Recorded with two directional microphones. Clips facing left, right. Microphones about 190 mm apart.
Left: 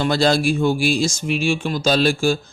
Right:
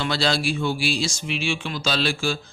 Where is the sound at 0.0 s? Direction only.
45° left (ahead or behind).